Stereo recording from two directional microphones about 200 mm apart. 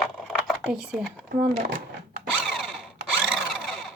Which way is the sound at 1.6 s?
40° right (ahead or behind).